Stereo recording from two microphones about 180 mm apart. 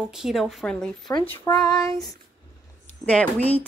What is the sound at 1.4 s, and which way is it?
Female singing, 20° left (ahead or behind).